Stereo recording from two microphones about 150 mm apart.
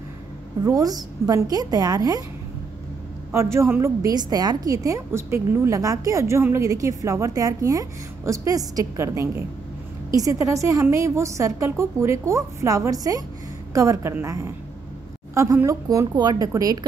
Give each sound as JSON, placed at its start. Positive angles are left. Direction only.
{"t": 0.7, "sound": "a woman's voice", "side_deg": -25}
{"t": 3.5, "sound": "a woman's voice", "side_deg": -15}